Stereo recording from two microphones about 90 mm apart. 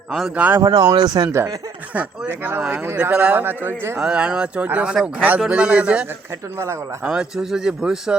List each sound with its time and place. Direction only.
0.3 s speech: 20° right (ahead or behind)
0.6 s speech: 45° right (ahead or behind)
1.3 s speech: 30° right (ahead or behind)
2.0 s speech: 20° right (ahead or behind)
3.9 s speech: 10° right (ahead or behind)
7.1 s a man's voice: 5° right (ahead or behind)